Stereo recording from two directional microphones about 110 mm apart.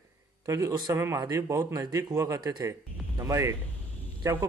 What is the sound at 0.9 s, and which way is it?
Speech, 25° right (ahead or behind).